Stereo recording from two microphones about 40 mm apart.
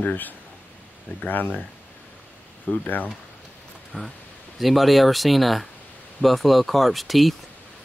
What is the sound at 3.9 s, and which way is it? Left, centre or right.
Speech, left.